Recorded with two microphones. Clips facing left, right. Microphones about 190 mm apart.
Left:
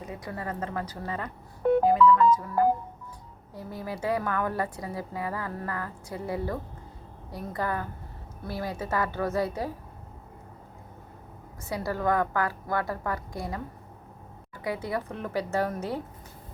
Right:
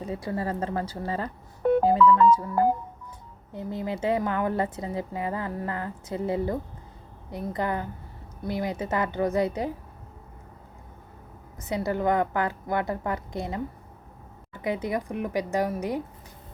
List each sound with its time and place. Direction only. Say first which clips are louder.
0.0 s a woman's voice: right 6 dB; 30° right (ahead or behind)
11.6 s a woman's voice: right 3 dB; 20° right (ahead or behind)
14.6 s a woman's voice: right 3 dB; 20° right (ahead or behind)